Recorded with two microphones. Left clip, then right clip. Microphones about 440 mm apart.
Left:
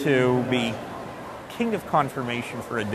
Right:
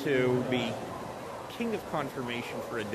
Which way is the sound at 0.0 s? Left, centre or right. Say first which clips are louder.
Left 6 dB; left.